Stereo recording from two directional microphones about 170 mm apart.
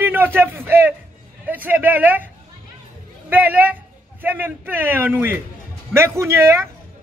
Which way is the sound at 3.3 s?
10° right (ahead or behind).